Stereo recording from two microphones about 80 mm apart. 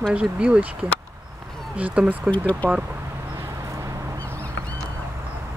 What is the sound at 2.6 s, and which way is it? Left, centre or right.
Speech, centre.